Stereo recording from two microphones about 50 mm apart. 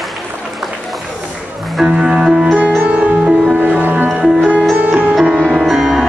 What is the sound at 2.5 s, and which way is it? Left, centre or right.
Music, right.